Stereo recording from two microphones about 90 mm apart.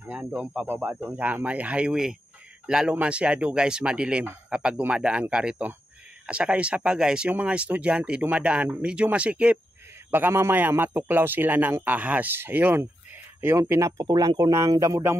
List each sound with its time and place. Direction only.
0.0 s speech: 15° right (ahead or behind)
10.1 s a man's voice: 25° right (ahead or behind)
13.6 s speech: 35° right (ahead or behind)
14.0 s speech: 50° right (ahead or behind)